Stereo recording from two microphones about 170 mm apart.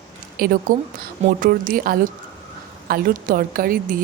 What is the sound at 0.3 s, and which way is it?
A woman's voice, 55° right (ahead or behind).